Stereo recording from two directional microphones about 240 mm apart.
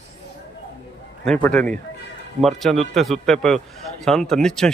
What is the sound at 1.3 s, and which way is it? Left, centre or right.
Speech, centre.